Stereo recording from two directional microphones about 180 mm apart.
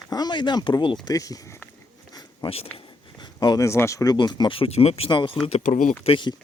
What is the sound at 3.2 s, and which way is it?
Speech, 20° left (ahead or behind).